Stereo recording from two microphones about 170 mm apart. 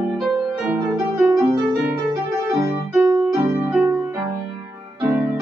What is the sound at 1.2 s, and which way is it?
Music, 15° right (ahead or behind).